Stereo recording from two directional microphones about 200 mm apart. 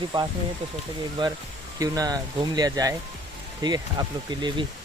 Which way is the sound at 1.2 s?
25° right (ahead or behind).